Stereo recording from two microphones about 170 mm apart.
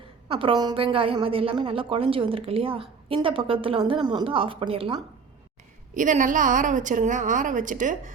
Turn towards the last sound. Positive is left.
turn(degrees=-50)  # may be behind; listen again after turning